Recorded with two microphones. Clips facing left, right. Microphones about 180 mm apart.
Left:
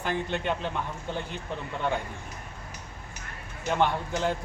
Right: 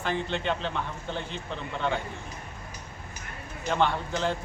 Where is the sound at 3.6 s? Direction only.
10° left (ahead or behind).